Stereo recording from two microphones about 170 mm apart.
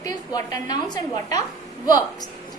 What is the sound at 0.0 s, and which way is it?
A woman's voice, 20° left (ahead or behind).